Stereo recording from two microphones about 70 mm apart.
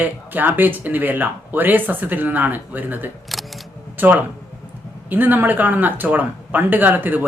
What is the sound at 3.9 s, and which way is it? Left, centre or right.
Speech, right.